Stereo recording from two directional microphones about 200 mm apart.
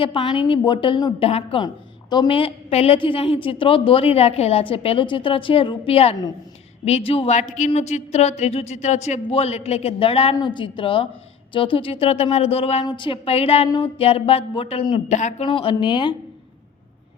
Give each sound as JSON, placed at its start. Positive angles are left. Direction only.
{"t": 0.0, "sound": "a woman's voice", "side_deg": 25}
{"t": 15.4, "sound": "a woman's voice", "side_deg": 25}